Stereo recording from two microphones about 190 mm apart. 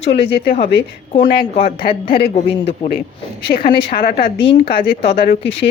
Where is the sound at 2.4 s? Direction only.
30° left (ahead or behind).